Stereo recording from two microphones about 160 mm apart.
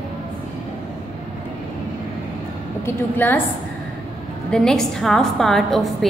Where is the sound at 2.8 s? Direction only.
10° left (ahead or behind).